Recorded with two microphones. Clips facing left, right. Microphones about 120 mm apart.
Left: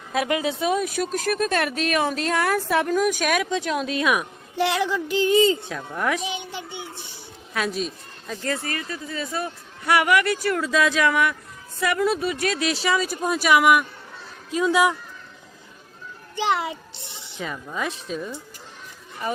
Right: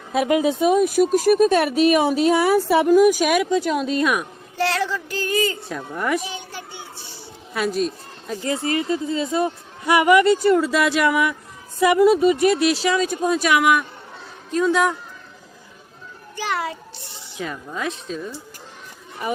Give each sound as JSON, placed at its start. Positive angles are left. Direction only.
{"t": 0.7, "sound": "speech", "side_deg": 0}
{"t": 4.5, "sound": "a sound", "side_deg": 15}
{"t": 5.6, "sound": "speech", "side_deg": 0}
{"t": 6.2, "sound": "child singing", "side_deg": 20}
{"t": 7.5, "sound": "speech", "side_deg": 0}
{"t": 8.4, "sound": "speech", "side_deg": -20}
{"t": 10.7, "sound": "speech", "side_deg": -5}
{"t": 12.5, "sound": "a woman's voice", "side_deg": 0}
{"t": 16.3, "sound": "a child's voice", "side_deg": 20}
{"t": 17.3, "sound": "speech", "side_deg": 0}